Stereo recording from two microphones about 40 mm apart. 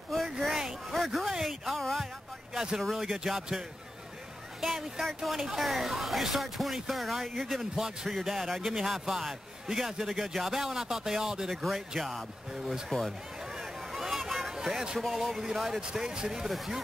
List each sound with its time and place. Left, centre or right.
0.1 s a sound: centre
1.3 s a man's voice: centre
4.6 s speech: centre
7.7 s a man's voice: centre
8.1 s a man's voice: centre
11.5 s speech: centre
12.1 s a man's voice: centre
13.0 s a sound: centre
14.5 s a man's voice: centre
16.4 s speech: centre